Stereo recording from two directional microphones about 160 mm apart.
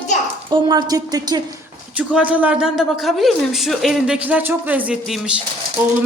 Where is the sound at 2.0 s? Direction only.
10° right (ahead or behind).